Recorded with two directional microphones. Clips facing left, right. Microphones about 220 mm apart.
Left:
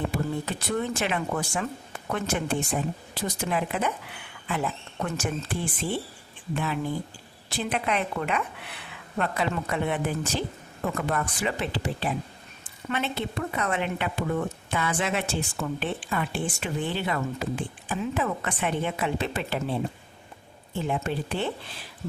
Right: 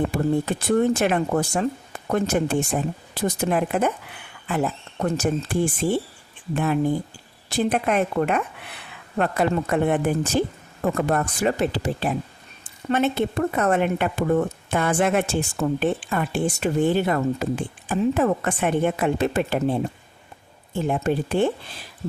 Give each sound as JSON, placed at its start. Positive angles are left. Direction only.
{"t": 0.1, "sound": "speech", "side_deg": -45}